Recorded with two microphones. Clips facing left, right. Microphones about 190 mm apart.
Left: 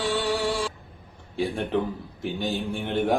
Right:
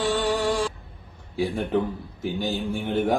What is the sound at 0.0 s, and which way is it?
Music, 45° right (ahead or behind).